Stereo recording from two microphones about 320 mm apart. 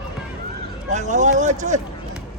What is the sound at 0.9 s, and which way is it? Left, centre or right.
Speech, right.